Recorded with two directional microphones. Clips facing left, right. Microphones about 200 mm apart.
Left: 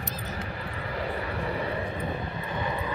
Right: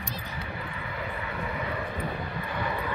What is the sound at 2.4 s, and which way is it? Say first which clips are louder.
Vehicle: even; 20° left (ahead or behind).